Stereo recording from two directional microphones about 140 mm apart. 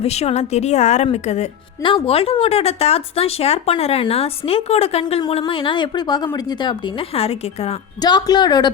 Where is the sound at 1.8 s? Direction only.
40° left (ahead or behind).